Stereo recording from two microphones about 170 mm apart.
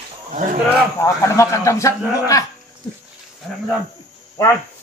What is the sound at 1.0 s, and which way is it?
Speech, 15° left (ahead or behind).